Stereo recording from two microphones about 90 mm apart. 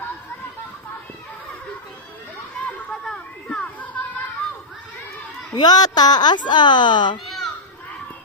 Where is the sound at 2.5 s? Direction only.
5° left (ahead or behind).